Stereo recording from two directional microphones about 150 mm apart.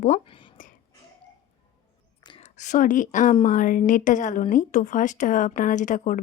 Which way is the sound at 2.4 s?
55° left (ahead or behind).